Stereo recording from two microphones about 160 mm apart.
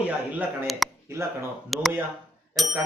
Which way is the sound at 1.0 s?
15° right (ahead or behind).